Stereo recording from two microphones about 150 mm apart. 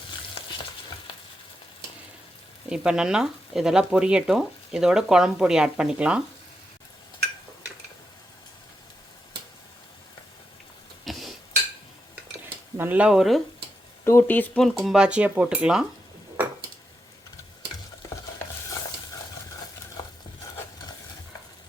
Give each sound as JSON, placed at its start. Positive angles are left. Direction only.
{"t": 0.4, "sound": "stir", "side_deg": 40}
{"t": 2.6, "sound": "speech", "side_deg": -5}
{"t": 11.0, "sound": "stir", "side_deg": 0}
{"t": 12.7, "sound": "speech", "side_deg": -10}
{"t": 14.0, "sound": "speech", "side_deg": 15}